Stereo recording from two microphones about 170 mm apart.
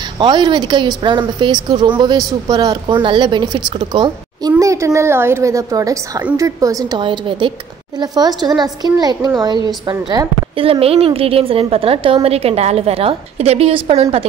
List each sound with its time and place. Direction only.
0.2 s a woman's voice: 25° right (ahead or behind)